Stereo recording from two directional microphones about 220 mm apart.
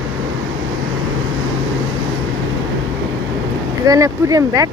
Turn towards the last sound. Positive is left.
turn(degrees=-15)  # may be behind; listen again after turning